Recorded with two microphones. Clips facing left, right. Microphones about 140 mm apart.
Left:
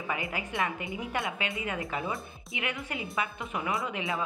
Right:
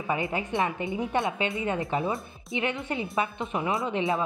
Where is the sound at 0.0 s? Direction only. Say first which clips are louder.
Right 5 dB; 25° right (ahead or behind).